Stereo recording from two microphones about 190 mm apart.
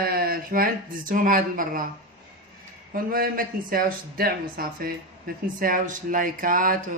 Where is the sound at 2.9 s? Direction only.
50° right (ahead or behind).